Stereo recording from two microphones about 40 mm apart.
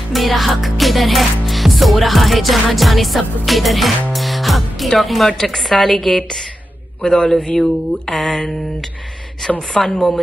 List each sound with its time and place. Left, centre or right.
0.1 s music: centre
7.0 s speech: centre
9.4 s speech: centre
9.8 s chopping: left